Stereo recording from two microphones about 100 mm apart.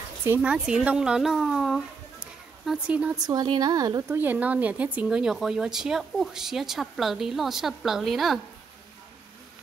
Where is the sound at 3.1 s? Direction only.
40° right (ahead or behind).